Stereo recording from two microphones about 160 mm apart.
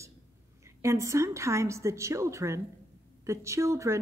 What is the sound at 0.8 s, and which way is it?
Speech, 20° right (ahead or behind).